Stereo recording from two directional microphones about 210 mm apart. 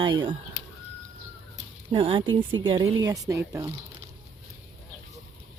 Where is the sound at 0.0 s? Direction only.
25° right (ahead or behind).